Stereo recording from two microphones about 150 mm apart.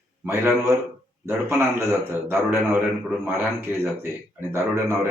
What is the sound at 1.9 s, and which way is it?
Speech, 15° right (ahead or behind).